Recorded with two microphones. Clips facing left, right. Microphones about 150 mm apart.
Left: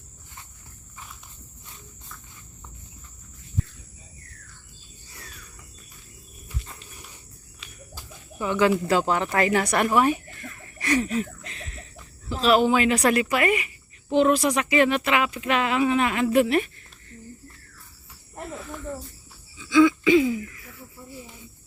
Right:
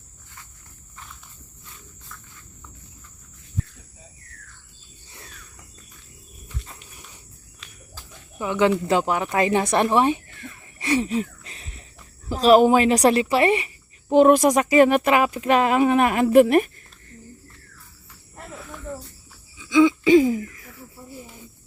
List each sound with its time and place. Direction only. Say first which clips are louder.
7.6 s a sound: even; centre (ahead or behind)
8.4 s speech: right 1 dB; 20° right (ahead or behind)
10.8 s a sound: right 2 dB; 25° right (ahead or behind)
12.3 s speech: right 5 dB; 40° right (ahead or behind)
14.1 s speech: right 5 dB; 45° right (ahead or behind)
18.5 s snake: even; centre (ahead or behind)
19.5 s cough: right 1 dB; 15° right (ahead or behind)
20.1 s throat clearing: right 4 dB; 40° right (ahead or behind)